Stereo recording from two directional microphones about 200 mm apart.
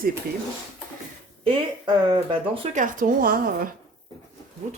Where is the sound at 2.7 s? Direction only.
40° right (ahead or behind).